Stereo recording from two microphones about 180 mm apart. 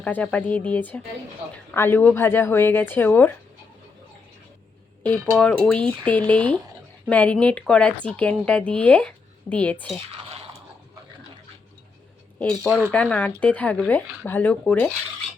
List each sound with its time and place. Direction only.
0.0 s a woman's voice: 5° left (ahead or behind)
5.3 s a woman's voice: 5° left (ahead or behind)
10.2 s a sound: 35° right (ahead or behind)
12.4 s a woman's voice: centre (ahead or behind)